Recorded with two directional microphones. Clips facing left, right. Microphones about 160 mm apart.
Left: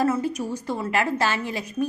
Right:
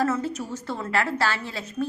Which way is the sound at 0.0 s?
15° left (ahead or behind).